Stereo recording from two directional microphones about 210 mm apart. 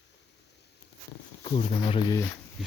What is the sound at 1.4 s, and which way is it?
Speech, 25° left (ahead or behind).